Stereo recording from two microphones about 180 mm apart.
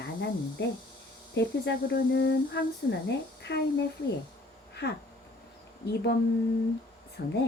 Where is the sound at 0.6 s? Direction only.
75° left (ahead or behind).